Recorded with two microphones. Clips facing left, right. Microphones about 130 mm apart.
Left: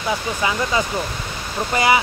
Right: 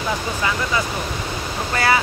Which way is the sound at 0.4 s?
20° left (ahead or behind).